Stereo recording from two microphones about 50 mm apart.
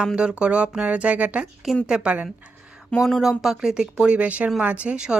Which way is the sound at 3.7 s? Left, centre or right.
Centre.